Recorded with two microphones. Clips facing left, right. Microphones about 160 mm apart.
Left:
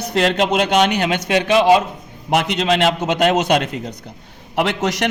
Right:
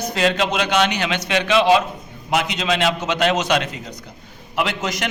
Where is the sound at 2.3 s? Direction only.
60° left (ahead or behind).